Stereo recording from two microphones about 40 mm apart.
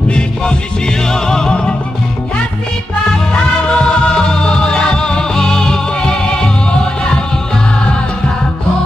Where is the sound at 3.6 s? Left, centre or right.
Left.